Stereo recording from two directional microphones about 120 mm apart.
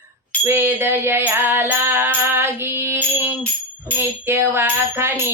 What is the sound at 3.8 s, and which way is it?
Jingle bell, 20° right (ahead or behind).